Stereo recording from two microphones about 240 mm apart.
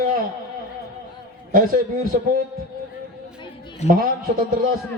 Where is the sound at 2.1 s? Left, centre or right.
Right.